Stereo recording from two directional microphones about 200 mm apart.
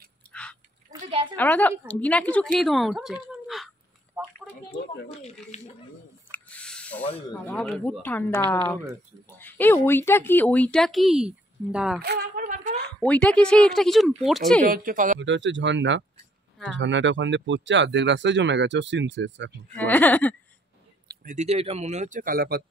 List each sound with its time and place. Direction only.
0.3 s dog: 5° left (ahead or behind)
1.3 s speech: 10° left (ahead or behind)
3.4 s a sound: centre (ahead or behind)
4.6 s speech: 55° left (ahead or behind)
6.3 s a sound: 5° left (ahead or behind)
7.1 s speech: 30° left (ahead or behind)
7.5 s speech: 5° left (ahead or behind)
12.0 s speech: 55° right (ahead or behind)
12.4 s a sound: 40° right (ahead or behind)
12.8 s a woman's voice: 5° left (ahead or behind)
14.6 s speech: 45° right (ahead or behind)
15.1 s speech: 65° right (ahead or behind)
19.7 s speech: 10° left (ahead or behind)
21.1 s speech: 45° right (ahead or behind)